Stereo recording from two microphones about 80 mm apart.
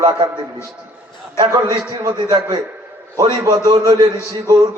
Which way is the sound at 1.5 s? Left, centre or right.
Right.